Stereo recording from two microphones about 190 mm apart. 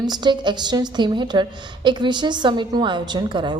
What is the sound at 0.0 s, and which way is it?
A woman's voice, 20° right (ahead or behind).